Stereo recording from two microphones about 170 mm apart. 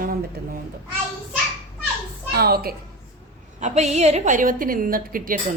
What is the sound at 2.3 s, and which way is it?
Speech, 65° right (ahead or behind).